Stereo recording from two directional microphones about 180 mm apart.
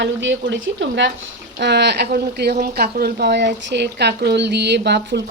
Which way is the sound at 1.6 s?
70° right (ahead or behind).